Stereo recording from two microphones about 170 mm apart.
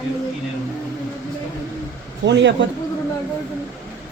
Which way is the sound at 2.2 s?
90° right.